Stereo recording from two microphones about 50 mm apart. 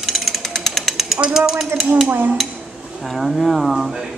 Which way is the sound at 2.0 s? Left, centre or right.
Right.